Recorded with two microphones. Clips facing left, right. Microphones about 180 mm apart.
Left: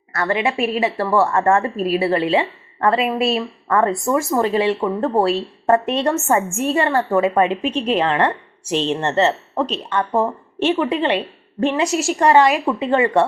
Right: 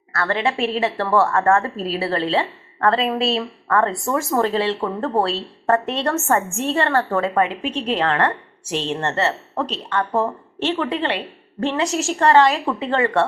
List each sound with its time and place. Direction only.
0.3 s a woman's voice: 10° left (ahead or behind)
3.7 s a woman's voice: 15° left (ahead or behind)
4.3 s speech: centre (ahead or behind)
4.5 s a woman's voice: 15° left (ahead or behind)